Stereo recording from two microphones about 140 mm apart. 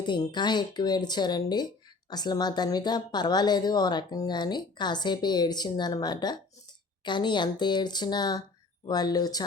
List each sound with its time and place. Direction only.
0.0 s speech: 35° left (ahead or behind)